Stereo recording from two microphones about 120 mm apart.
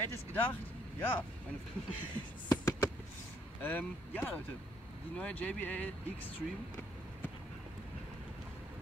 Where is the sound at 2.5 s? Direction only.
30° left (ahead or behind).